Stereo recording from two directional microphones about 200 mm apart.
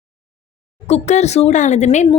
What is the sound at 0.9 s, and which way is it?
Speech, 35° left (ahead or behind).